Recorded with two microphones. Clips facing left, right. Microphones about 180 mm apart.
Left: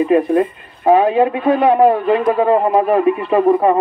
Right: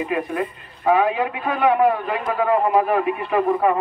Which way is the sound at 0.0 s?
35° left (ahead or behind).